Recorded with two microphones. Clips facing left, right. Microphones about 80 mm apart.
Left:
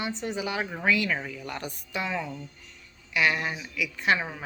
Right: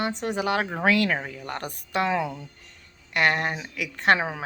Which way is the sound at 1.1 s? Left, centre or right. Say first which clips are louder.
Right 3 dB; right.